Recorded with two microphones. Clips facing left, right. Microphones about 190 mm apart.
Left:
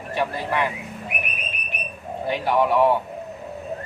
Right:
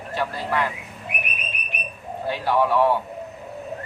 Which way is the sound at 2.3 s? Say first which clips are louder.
Left 1 dB; 15° left (ahead or behind).